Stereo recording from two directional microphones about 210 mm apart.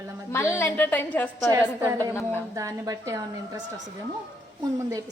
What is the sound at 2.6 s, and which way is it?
A woman's voice, 15° right (ahead or behind).